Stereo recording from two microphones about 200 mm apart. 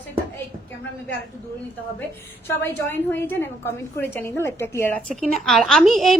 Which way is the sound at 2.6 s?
10° left (ahead or behind).